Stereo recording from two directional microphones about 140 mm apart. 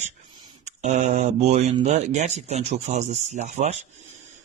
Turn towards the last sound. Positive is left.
turn(degrees=-55)  # may be behind; listen again after turning